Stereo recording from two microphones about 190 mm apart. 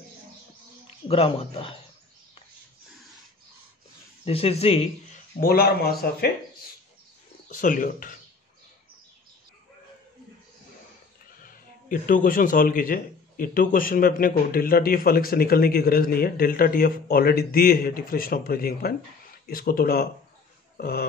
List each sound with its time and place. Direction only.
1.0 s speech: 30° left (ahead or behind)
4.2 s speech: 30° left (ahead or behind)
5.4 s speech: 55° left (ahead or behind)
7.4 s speech: 45° left (ahead or behind)
11.4 s a man's voice: 45° left (ahead or behind)